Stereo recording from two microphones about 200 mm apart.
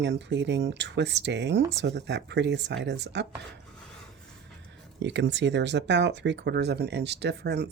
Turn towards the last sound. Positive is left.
turn(degrees=-60)  # may be behind; listen again after turning